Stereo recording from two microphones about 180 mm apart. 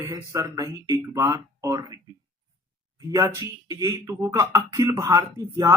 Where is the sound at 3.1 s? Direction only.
20° right (ahead or behind).